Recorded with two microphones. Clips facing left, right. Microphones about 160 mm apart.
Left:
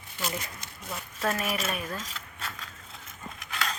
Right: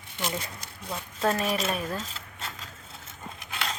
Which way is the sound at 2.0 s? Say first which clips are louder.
Right 1 dB; 25° right (ahead or behind).